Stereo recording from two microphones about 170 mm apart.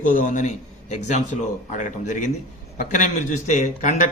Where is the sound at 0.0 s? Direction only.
50° left (ahead or behind).